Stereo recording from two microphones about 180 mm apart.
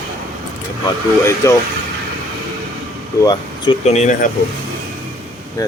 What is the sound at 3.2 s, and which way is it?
Speech, 25° left (ahead or behind).